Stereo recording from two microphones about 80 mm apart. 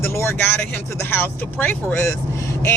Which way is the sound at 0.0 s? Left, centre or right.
Left.